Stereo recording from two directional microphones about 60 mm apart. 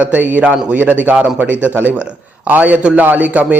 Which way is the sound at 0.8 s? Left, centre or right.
Right.